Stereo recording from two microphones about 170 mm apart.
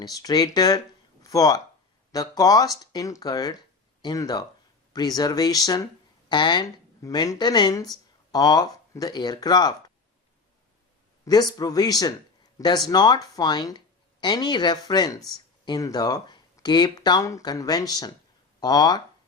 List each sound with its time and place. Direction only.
0.0 s speech: 20° left (ahead or behind)
11.5 s speech: 20° left (ahead or behind)